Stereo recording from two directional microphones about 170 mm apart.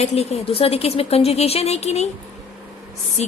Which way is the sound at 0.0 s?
40° left (ahead or behind).